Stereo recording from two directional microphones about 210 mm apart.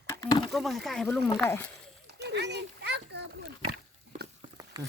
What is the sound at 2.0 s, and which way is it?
Children playing, 55° right (ahead or behind).